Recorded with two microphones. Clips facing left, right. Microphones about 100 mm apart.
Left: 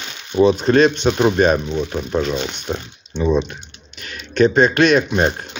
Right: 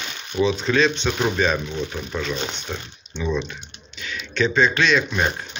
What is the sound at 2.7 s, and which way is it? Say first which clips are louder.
Speech: left 7 dB; 35° left (ahead or behind).